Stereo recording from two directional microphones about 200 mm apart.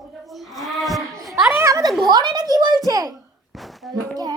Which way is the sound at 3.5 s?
Centre (ahead or behind).